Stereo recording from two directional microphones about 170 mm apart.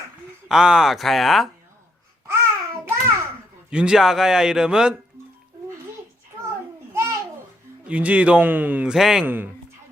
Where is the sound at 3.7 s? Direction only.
5° right (ahead or behind).